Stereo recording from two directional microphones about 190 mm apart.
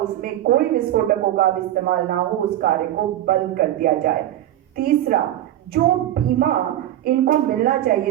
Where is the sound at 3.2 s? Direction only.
50° right (ahead or behind).